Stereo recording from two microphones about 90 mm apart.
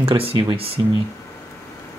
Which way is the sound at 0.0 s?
90° right.